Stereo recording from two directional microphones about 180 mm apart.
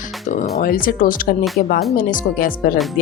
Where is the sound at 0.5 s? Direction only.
50° left (ahead or behind).